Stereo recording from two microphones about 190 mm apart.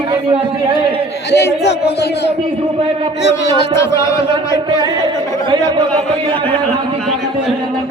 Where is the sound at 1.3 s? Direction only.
60° left (ahead or behind).